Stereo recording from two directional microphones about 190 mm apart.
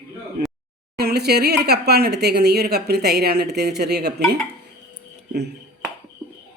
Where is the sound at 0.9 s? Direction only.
55° right (ahead or behind).